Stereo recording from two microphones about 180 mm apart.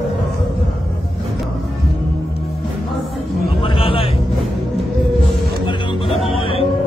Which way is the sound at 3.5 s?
30° left (ahead or behind).